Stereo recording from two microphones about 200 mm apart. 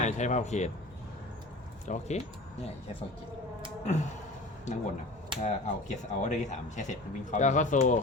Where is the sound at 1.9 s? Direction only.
35° left (ahead or behind).